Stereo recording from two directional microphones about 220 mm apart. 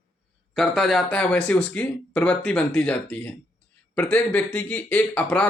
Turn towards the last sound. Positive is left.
turn(degrees=5)  # may be behind; listen again after turning